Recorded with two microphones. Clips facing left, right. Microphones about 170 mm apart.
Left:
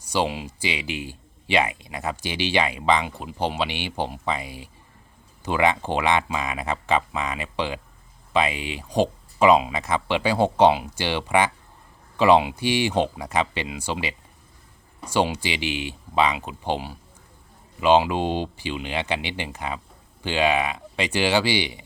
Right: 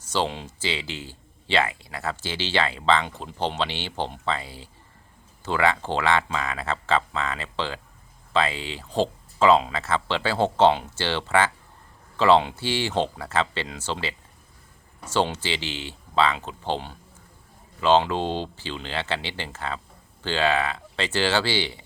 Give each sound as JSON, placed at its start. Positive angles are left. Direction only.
{"t": 0.0, "sound": "speech", "side_deg": 10}